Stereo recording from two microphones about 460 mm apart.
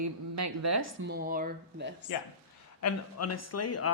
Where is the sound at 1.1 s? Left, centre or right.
Centre.